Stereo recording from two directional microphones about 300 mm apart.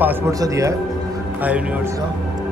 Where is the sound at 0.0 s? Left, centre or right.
Centre.